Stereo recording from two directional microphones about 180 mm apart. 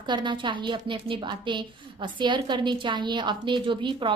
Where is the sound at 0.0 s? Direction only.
25° right (ahead or behind).